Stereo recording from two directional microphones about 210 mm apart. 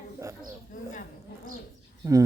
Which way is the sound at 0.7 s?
40° left (ahead or behind).